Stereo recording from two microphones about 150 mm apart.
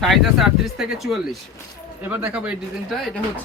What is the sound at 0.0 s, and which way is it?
Speech, centre (ahead or behind).